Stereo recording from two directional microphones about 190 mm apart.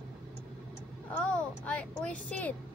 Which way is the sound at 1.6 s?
5° left (ahead or behind).